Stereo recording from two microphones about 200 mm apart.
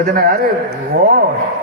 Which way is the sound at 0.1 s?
45° right (ahead or behind).